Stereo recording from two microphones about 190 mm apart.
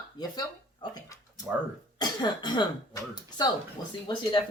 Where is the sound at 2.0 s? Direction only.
20° left (ahead or behind).